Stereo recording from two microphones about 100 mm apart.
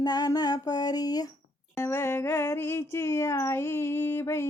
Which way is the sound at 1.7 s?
25° left (ahead or behind).